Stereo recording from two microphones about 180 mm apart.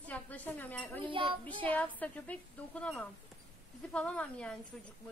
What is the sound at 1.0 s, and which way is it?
Speech, 30° right (ahead or behind).